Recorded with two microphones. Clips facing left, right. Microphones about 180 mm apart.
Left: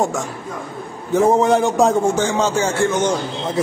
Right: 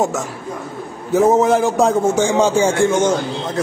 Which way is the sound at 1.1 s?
5° right (ahead or behind).